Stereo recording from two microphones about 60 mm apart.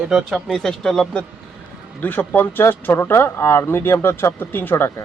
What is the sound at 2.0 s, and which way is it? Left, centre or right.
Speech, left.